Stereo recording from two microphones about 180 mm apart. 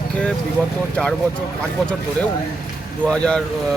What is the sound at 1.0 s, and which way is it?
Speech, 5° left (ahead or behind).